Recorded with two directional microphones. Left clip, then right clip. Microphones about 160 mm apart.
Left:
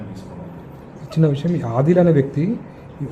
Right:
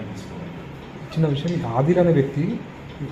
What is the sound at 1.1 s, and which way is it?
A man's voice, 75° left (ahead or behind).